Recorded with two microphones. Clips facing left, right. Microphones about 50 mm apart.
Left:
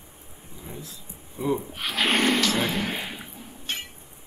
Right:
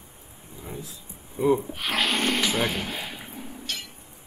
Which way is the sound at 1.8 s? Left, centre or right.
Centre.